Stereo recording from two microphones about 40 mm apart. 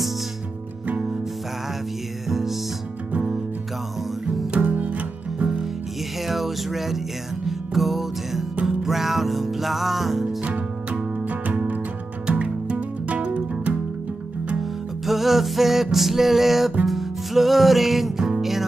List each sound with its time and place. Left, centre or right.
0.8 s music: right
2.2 s music: centre
3.1 s music: right
4.6 s music: right
5.4 s music: centre
6.2 s a sound: centre
7.4 s music: centre
10.4 s music: right
12.3 s music: right
14.6 s music: centre